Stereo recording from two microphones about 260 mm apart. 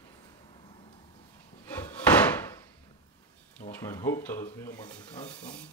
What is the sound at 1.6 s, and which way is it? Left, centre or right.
Wood, centre.